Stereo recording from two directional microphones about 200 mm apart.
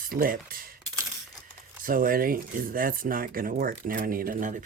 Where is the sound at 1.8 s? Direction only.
45° right (ahead or behind).